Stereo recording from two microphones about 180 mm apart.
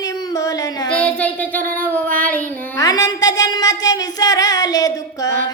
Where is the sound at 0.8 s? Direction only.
5° left (ahead or behind).